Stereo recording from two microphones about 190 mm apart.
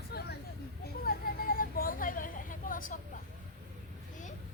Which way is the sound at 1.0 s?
50° left (ahead or behind).